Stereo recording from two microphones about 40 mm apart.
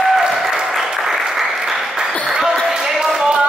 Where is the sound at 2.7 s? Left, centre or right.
Centre.